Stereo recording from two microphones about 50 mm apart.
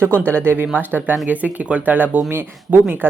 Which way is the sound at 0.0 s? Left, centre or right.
Right.